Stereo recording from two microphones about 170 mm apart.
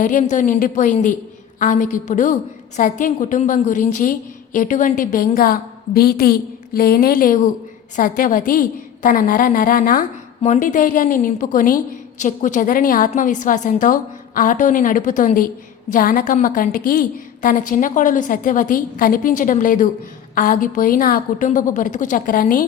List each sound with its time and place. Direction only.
0.0 s a woman's voice: 50° left (ahead or behind)